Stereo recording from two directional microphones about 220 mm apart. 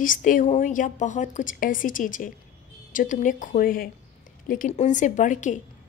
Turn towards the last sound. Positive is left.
turn(degrees=35)  # may be behind; listen again after turning